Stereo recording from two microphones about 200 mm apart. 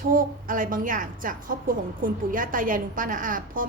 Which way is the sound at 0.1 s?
45° right (ahead or behind).